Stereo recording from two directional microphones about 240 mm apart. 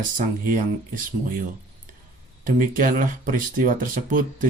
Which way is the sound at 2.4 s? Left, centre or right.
Right.